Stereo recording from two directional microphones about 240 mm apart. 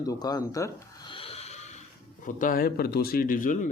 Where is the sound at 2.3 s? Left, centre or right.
Left.